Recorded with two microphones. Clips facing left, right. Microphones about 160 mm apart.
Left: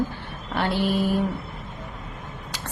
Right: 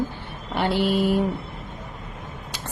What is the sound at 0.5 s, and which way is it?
Speech, 15° right (ahead or behind).